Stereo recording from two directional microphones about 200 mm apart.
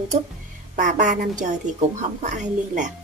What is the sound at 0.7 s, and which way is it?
Speech, 40° right (ahead or behind).